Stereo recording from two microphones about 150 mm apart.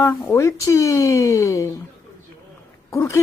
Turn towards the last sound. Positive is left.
turn(degrees=20)  # may be behind; listen again after turning